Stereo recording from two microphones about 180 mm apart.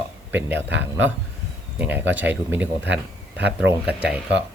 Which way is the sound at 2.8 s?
75° right (ahead or behind).